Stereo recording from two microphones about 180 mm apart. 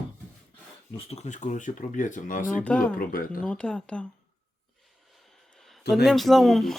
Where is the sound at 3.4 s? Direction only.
5° left (ahead or behind).